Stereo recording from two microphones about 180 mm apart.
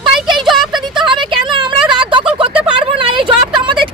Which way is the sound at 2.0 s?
30° right (ahead or behind).